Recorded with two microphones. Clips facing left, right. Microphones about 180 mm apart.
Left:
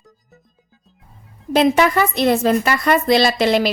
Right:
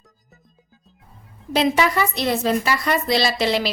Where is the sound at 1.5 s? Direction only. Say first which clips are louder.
Left 4 dB; 55° left (ahead or behind).